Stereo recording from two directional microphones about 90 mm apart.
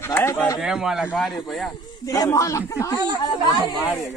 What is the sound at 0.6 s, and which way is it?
Speech, 5° right (ahead or behind).